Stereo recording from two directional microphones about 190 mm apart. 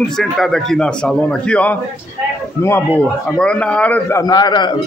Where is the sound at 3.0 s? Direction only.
5° left (ahead or behind); by 4.8 s 25° left (ahead or behind).